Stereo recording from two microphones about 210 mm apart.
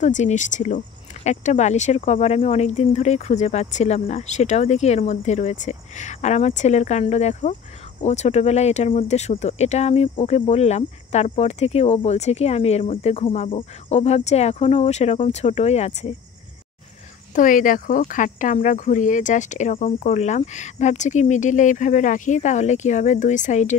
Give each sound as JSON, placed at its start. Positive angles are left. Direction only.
{"t": 0.0, "sound": "speech", "side_deg": 35}
{"t": 17.4, "sound": "speech", "side_deg": 40}